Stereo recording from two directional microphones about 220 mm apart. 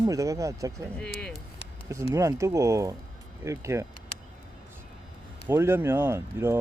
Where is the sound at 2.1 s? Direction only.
15° right (ahead or behind).